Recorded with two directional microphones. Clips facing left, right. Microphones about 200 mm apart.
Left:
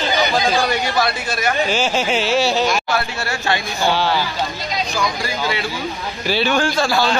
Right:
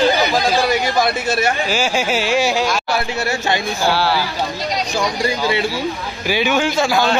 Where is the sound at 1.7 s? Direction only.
10° right (ahead or behind).